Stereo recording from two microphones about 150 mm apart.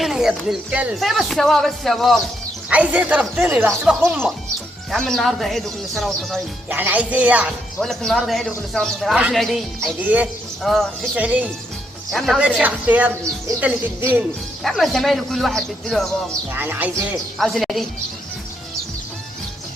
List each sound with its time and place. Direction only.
0.0 s speech: 5° right (ahead or behind)
4.9 s speech: 5° left (ahead or behind)
6.7 s speech: 10° right (ahead or behind)
7.8 s speech: centre (ahead or behind)
10.0 s speech: 10° right (ahead or behind)
10.6 s speech: centre (ahead or behind)
11.1 s speech: 10° right (ahead or behind)
14.6 s speech: centre (ahead or behind)
16.6 s speech: 15° right (ahead or behind)
17.3 s speech: centre (ahead or behind)